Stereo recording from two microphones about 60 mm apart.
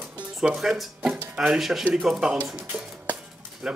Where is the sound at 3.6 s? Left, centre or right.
Centre.